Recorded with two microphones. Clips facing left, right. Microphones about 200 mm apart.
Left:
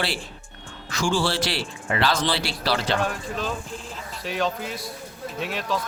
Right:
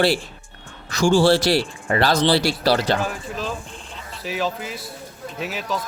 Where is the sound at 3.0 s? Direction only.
Centre (ahead or behind).